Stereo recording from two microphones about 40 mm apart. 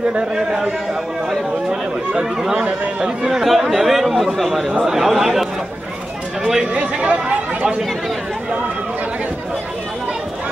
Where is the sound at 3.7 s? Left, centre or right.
Centre.